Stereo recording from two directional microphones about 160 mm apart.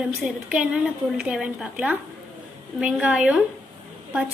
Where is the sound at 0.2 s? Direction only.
5° right (ahead or behind).